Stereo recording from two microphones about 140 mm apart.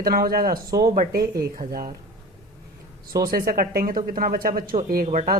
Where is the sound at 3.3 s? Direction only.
90° right; by 5.3 s 65° right (ahead or behind).